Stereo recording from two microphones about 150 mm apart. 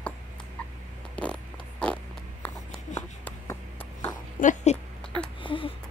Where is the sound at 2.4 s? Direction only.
10° left (ahead or behind).